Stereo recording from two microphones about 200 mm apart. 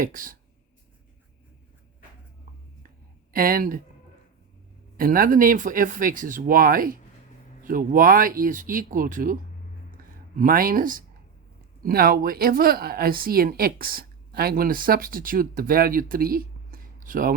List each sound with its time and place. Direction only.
0.0 s speech: 45° right (ahead or behind)
3.3 s speech: 45° right (ahead or behind)
4.9 s speech: 45° right (ahead or behind)